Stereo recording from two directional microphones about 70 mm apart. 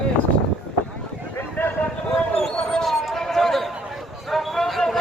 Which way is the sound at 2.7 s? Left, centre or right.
Centre.